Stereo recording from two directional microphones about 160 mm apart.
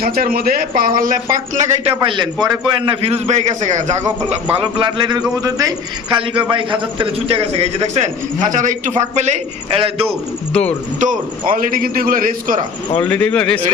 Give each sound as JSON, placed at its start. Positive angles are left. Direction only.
{"t": 0.0, "sound": "speech", "side_deg": -70}
{"t": 2.0, "sound": "a man's voice", "side_deg": -30}
{"t": 4.5, "sound": "a man's voice", "side_deg": -30}
{"t": 10.5, "sound": "a man's voice", "side_deg": 10}
{"t": 11.0, "sound": "speech", "side_deg": -55}
{"t": 13.0, "sound": "a man's voice", "side_deg": 10}